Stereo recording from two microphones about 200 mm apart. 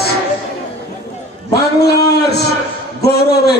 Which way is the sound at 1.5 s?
55° left (ahead or behind).